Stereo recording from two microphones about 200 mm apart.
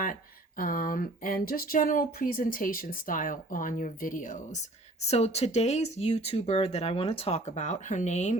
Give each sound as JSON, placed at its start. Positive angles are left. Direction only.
{"t": 0.0, "sound": "speech", "side_deg": 45}